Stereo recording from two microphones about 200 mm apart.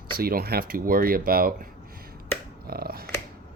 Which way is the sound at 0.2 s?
50° right (ahead or behind).